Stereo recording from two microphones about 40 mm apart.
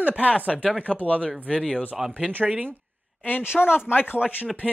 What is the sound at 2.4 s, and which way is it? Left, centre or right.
Speech, right.